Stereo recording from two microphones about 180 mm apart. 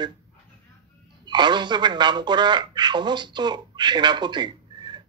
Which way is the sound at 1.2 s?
25° right (ahead or behind).